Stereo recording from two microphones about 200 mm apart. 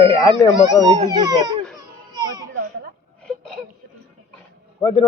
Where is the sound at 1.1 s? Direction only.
20° right (ahead or behind).